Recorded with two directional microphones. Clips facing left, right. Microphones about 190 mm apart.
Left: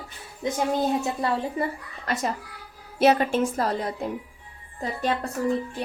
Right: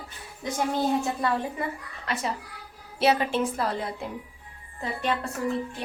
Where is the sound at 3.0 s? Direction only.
45° left (ahead or behind).